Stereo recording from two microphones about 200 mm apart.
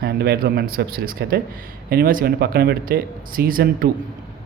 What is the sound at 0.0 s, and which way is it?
Speech, 55° right (ahead or behind).